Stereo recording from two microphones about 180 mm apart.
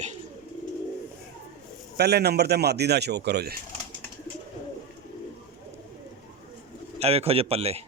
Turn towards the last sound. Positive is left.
turn(degrees=-35)  # may be behind; listen again after turning